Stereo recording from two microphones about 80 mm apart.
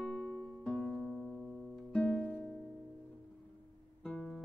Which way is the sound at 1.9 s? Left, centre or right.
Centre.